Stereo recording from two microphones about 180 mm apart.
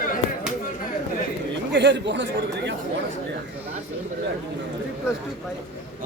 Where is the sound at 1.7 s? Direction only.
80° right.